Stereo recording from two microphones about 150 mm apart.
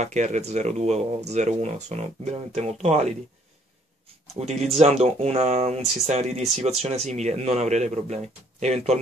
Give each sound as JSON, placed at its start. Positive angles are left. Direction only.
{"t": 0.0, "sound": "speech", "side_deg": -50}
{"t": 4.4, "sound": "speech", "side_deg": -45}